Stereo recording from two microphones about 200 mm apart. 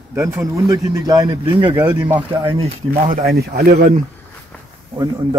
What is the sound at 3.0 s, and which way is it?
Speech, 45° right (ahead or behind).